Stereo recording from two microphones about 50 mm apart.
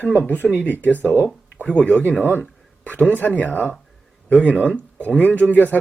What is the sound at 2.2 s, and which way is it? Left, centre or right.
Speech, left.